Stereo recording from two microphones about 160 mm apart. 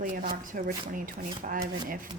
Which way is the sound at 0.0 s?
60° right (ahead or behind).